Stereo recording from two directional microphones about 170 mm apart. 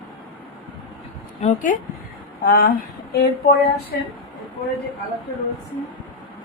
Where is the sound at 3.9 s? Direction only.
70° left (ahead or behind).